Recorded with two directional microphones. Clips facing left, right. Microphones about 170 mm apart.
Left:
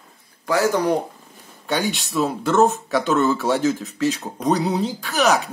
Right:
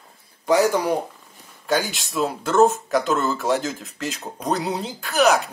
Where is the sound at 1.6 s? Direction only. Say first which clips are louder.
Even; centre (ahead or behind).